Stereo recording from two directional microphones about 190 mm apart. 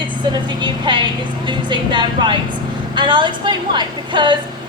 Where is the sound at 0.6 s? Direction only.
25° right (ahead or behind).